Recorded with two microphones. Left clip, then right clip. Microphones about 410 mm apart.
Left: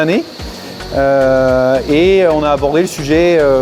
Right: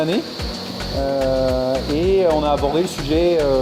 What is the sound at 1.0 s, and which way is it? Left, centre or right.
Speech, left.